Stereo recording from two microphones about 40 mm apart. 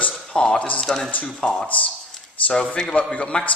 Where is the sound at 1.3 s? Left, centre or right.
Centre.